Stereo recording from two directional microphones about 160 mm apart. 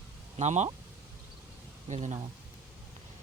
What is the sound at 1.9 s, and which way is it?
Speech, 45° right (ahead or behind).